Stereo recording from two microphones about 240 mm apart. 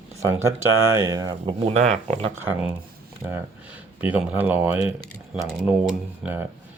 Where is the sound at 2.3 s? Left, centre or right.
Centre.